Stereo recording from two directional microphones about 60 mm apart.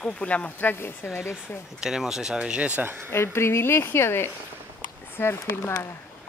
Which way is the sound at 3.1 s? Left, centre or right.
Left.